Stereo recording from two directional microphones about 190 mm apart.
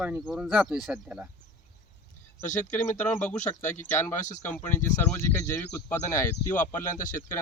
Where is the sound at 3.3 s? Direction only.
40° left (ahead or behind).